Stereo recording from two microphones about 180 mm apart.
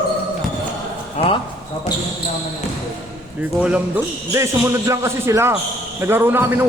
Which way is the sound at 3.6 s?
10° right (ahead or behind).